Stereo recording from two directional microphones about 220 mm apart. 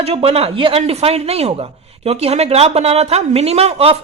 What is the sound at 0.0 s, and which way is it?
A woman's voice, 25° right (ahead or behind).